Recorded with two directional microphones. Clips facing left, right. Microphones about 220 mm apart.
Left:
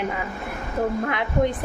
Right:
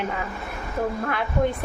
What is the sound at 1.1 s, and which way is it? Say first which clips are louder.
Speech: left 1 dB; 15° left (ahead or behind).